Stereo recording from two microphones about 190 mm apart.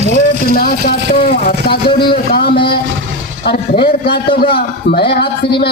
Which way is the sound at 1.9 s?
55° left (ahead or behind).